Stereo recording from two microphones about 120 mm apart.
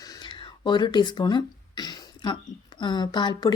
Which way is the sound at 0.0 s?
35° left (ahead or behind).